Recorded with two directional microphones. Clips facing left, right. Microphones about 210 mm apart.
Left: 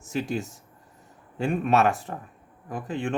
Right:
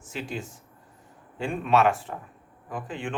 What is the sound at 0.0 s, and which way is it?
A man's voice, 45° left (ahead or behind).